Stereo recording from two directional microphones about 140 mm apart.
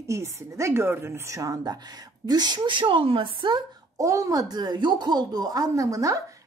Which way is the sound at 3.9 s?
25° right (ahead or behind).